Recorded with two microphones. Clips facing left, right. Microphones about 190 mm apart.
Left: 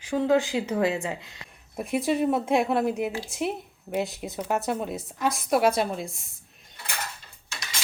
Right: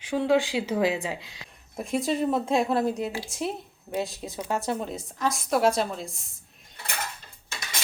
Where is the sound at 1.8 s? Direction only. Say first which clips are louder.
Left 1 dB; centre (ahead or behind).